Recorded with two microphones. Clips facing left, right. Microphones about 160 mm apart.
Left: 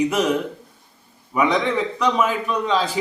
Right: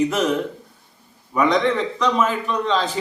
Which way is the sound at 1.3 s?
10° left (ahead or behind).